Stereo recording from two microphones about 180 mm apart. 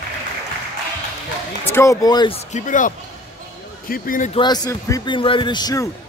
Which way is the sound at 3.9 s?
50° left (ahead or behind).